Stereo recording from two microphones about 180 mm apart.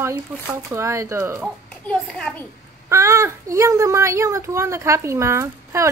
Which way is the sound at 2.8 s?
15° right (ahead or behind).